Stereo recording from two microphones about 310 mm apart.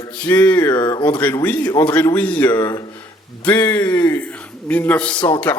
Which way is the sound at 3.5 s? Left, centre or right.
Centre.